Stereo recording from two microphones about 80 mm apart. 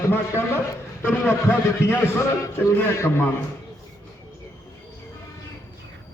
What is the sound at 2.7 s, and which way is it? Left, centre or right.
Speech, left.